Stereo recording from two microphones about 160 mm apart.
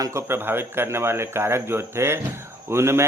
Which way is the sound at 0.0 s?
15° right (ahead or behind).